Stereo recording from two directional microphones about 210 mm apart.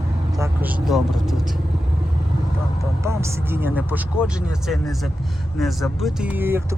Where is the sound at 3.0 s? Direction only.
15° right (ahead or behind).